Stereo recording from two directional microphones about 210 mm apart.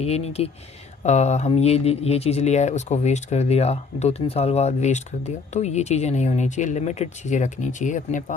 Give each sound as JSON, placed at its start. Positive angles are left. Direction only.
{"t": 0.0, "sound": "speech", "side_deg": 30}